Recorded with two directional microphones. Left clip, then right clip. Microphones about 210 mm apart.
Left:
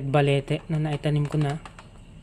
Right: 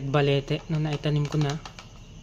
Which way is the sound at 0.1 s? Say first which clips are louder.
Left 1 dB; 10° left (ahead or behind).